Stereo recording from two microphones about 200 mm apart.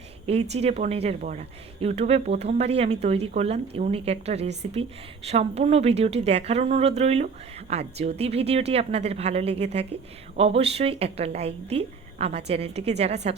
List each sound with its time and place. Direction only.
0.3 s speech: 30° right (ahead or behind)